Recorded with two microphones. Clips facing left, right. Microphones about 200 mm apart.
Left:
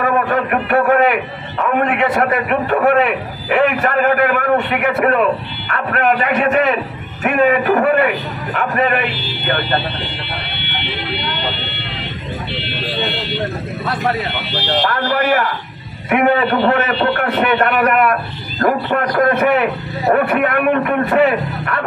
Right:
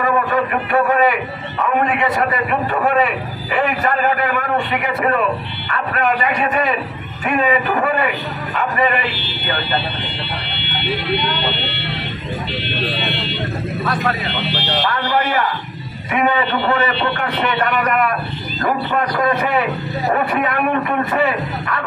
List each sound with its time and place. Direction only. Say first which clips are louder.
0.0 s a sound: left 1 dB; 55° left (ahead or behind)
1.8 s a man's voice: left 3 dB; 60° left (ahead or behind)
15.1 s a man's voice: left 1 dB; 65° left (ahead or behind)